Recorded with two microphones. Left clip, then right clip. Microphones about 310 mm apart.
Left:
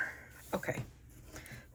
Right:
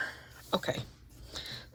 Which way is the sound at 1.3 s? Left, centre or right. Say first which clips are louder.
Right 9 dB; centre.